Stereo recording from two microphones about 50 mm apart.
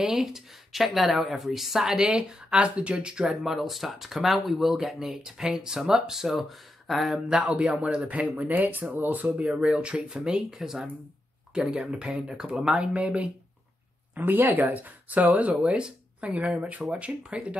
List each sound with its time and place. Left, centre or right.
0.0 s speech: centre
3.4 s speech: centre
7.2 s speech: right
9.3 s speech: right
14.2 s speech: right